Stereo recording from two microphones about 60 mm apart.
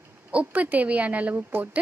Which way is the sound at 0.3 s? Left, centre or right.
Right.